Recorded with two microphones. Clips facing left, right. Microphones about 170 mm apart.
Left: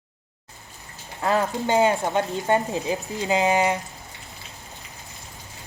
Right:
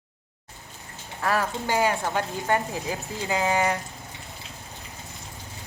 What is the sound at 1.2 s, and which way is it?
Speech, 20° left (ahead or behind).